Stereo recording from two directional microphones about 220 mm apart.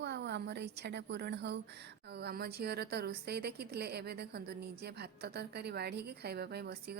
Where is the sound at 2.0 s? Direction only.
45° right (ahead or behind).